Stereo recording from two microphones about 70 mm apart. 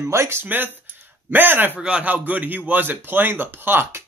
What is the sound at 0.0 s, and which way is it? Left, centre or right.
A man's voice, right.